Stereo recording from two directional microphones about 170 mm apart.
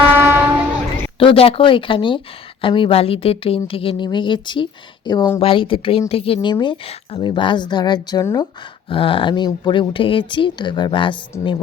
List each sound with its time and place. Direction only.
0.2 s train: 15° right (ahead or behind)
1.2 s a woman's voice: 35° left (ahead or behind)
8.9 s speech: 30° left (ahead or behind)